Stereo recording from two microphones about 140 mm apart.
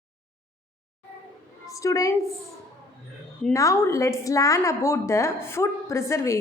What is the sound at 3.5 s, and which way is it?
A woman's voice, 20° left (ahead or behind).